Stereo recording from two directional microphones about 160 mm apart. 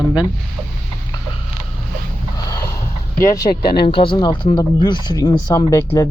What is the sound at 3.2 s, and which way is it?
Speech, 25° left (ahead or behind).